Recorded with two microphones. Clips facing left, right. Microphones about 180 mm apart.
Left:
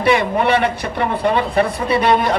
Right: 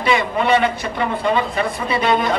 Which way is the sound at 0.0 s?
60° left (ahead or behind).